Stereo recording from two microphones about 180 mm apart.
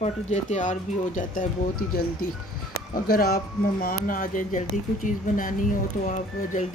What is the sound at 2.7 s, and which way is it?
Speech, 55° left (ahead or behind).